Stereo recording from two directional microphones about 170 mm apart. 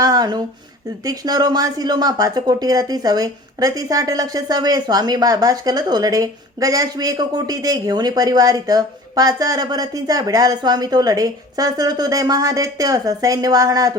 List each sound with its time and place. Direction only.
0.0 s speech: 25° right (ahead or behind)